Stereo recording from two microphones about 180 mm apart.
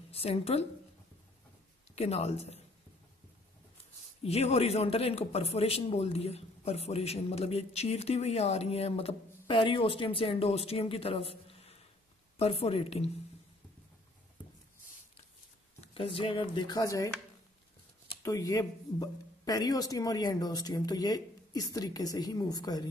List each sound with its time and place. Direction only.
0.1 s a woman's voice: 35° left (ahead or behind)
2.0 s speech: 35° left (ahead or behind)
4.2 s speech: 35° left (ahead or behind)
15.8 s speech: 30° left (ahead or behind)
18.2 s speech: 20° left (ahead or behind)